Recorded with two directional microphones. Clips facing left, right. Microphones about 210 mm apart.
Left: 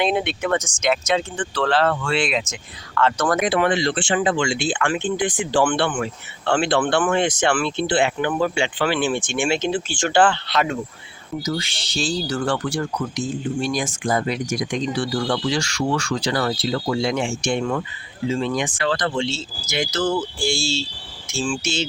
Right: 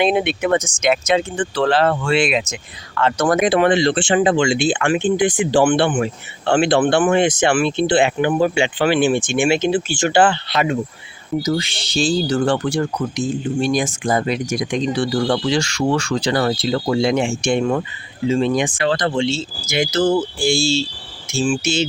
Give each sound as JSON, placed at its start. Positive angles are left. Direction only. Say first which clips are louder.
{"t": 0.0, "sound": "speech", "louder": "right 4 dB", "side_deg": -15}
{"t": 11.4, "sound": "speech", "louder": "right 5 dB", "side_deg": -20}